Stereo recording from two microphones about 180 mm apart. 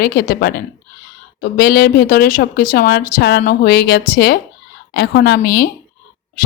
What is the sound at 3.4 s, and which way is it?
A woman's voice, 55° left (ahead or behind).